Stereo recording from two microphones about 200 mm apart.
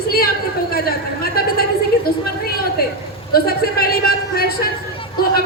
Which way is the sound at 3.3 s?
50° left (ahead or behind).